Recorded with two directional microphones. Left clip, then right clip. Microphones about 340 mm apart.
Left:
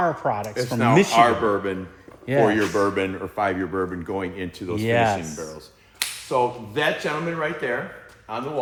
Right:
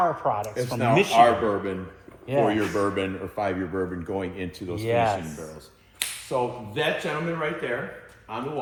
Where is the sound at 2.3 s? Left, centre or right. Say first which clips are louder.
Left 4 dB; left.